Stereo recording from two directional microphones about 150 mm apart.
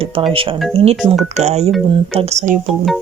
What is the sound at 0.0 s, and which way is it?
Speech, 40° right (ahead or behind).